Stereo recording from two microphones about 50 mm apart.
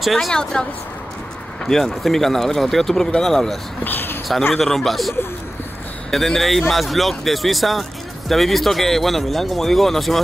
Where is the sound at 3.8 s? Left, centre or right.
Left.